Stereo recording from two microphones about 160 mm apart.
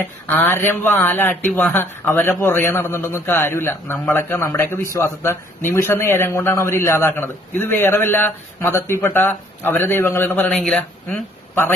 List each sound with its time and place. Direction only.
0.0 s a man's voice: 10° left (ahead or behind)